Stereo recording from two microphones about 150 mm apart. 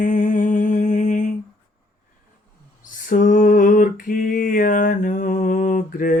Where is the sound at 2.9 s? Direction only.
60° left (ahead or behind).